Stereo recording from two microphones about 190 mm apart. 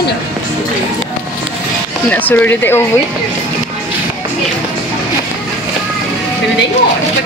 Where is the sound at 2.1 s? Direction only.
10° left (ahead or behind).